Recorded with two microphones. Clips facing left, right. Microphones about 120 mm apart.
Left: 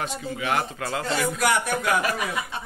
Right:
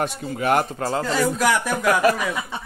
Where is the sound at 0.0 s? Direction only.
50° right (ahead or behind).